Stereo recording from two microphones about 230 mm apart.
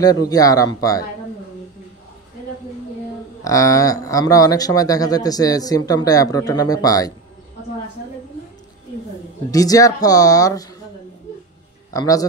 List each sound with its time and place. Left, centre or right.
0.0 s speech: centre
3.4 s speech: centre
9.5 s speech: centre
11.9 s speech: centre